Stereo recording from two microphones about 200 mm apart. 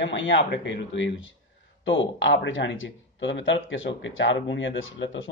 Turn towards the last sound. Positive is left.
turn(degrees=75)  # may be behind; listen again after turning